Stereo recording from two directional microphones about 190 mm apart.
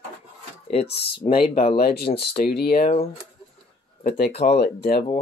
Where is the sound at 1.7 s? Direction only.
55° left (ahead or behind).